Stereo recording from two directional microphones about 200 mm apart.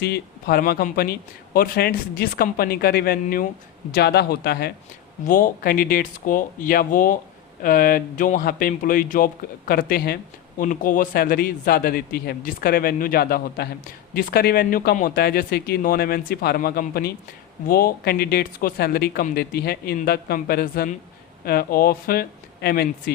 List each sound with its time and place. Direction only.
0.0 s speech: 50° left (ahead or behind)